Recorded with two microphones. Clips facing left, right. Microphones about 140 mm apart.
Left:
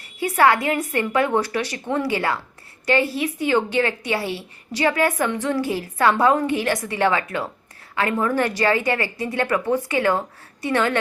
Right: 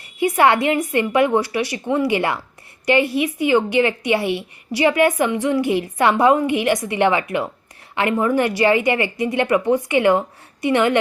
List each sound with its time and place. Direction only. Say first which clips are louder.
0.2 s a woman's voice: right 2 dB; 20° right (ahead or behind)